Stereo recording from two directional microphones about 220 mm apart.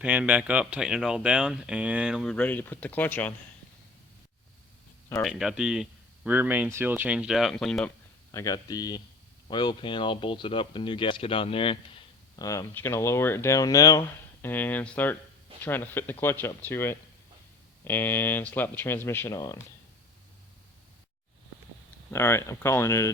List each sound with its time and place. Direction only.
0.0 s speech: 5° right (ahead or behind)
5.2 s speech: centre (ahead or behind)
8.3 s speech: 15° left (ahead or behind)
22.1 s speech: 10° left (ahead or behind)